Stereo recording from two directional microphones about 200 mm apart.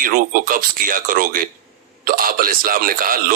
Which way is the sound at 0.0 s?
45° right (ahead or behind).